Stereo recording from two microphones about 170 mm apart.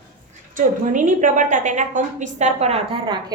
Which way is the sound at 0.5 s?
50° right (ahead or behind).